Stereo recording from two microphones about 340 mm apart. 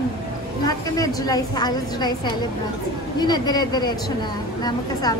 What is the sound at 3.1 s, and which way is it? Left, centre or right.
Speech, centre.